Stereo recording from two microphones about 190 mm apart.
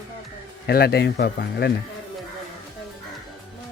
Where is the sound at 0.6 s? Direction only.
55° left (ahead or behind).